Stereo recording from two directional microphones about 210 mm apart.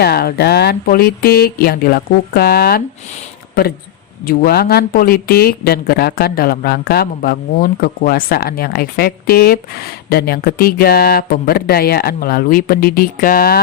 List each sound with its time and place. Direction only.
0.0 s speech: 50° left (ahead or behind)
4.3 s speech: 50° left (ahead or behind)